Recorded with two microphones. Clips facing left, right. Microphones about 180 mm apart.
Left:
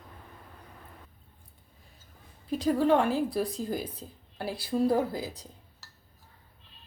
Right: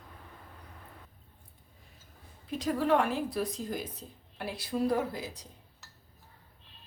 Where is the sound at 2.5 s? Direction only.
30° left (ahead or behind).